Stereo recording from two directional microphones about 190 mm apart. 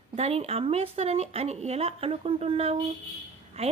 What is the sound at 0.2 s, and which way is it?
Speech, 30° right (ahead or behind).